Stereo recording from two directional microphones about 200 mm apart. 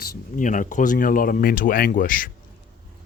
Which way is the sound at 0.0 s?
45° left (ahead or behind).